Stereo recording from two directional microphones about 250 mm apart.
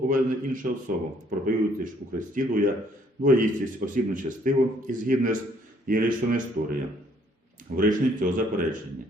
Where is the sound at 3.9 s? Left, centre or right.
Right.